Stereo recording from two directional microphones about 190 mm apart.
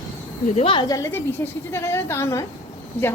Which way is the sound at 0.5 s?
30° left (ahead or behind).